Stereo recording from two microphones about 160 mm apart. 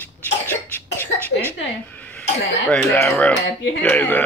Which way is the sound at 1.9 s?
10° left (ahead or behind).